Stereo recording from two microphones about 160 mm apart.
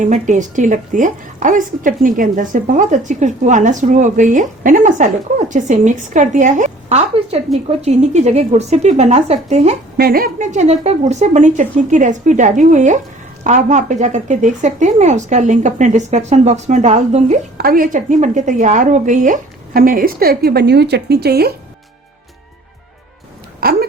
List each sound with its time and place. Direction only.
0.0 s a woman's voice: 50° right (ahead or behind)
10.0 s a woman's voice: 70° right (ahead or behind); by 17.3 s 45° right (ahead or behind)
17.6 s a woman's voice: 65° right (ahead or behind)
23.6 s a sound: 70° right (ahead or behind)